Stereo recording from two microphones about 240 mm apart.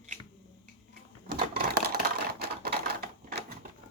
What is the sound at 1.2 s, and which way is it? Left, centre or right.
Typewriter, right.